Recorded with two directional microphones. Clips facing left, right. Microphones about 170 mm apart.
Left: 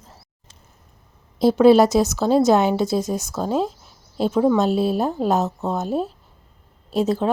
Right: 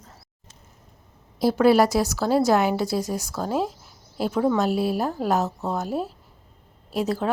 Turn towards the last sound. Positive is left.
turn(degrees=25)  # may be behind; listen again after turning